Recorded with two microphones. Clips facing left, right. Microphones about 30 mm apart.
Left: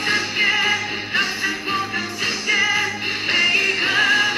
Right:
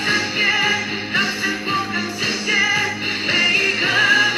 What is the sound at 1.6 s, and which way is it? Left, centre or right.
Music, centre.